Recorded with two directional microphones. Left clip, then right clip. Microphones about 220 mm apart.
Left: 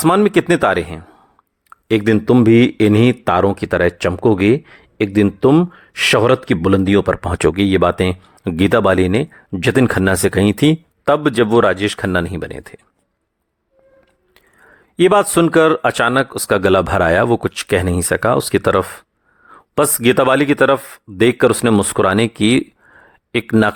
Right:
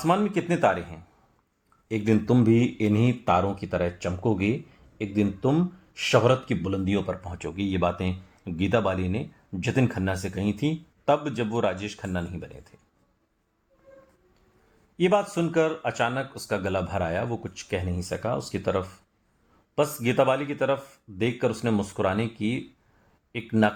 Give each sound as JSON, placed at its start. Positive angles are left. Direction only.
{"t": 0.0, "sound": "speech", "side_deg": 45}
{"t": 14.9, "sound": "speech", "side_deg": 50}